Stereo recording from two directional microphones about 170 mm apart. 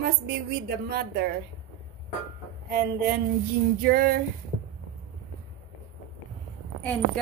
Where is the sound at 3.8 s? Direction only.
65° right (ahead or behind).